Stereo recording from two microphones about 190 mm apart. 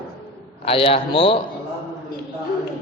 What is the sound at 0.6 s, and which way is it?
Speech, 30° left (ahead or behind).